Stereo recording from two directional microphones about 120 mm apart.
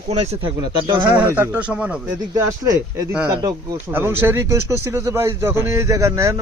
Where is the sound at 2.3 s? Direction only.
30° right (ahead or behind).